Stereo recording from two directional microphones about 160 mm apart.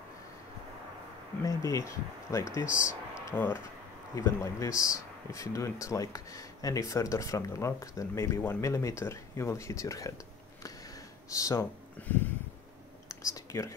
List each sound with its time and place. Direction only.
1.4 s speech: 20° left (ahead or behind)
11.2 s speech: 20° left (ahead or behind)
12.0 s a sound: 10° left (ahead or behind)